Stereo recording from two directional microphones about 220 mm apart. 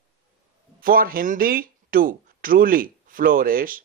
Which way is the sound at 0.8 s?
40° right (ahead or behind).